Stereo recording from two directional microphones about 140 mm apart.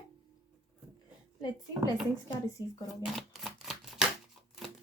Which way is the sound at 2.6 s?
20° right (ahead or behind).